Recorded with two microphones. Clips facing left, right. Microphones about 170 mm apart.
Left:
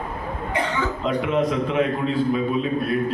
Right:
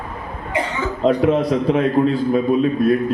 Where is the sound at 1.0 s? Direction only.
35° right (ahead or behind).